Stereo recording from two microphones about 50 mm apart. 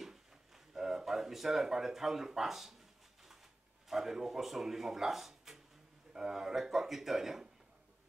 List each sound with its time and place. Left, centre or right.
0.7 s speech: centre
3.9 s speech: centre